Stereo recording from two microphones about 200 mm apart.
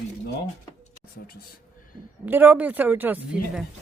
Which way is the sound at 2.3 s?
10° right (ahead or behind).